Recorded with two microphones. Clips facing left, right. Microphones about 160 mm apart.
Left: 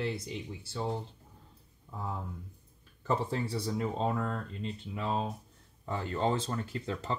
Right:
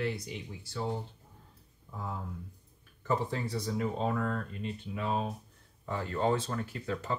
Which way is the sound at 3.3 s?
30° left (ahead or behind).